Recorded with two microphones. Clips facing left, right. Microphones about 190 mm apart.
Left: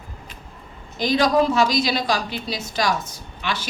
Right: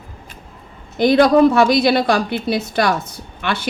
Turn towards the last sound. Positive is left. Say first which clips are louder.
# right 5 dB
turn(degrees=-55)  # may be behind; listen again after turning